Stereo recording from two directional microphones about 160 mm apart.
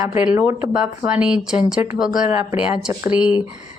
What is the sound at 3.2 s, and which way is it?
Speech, 30° left (ahead or behind).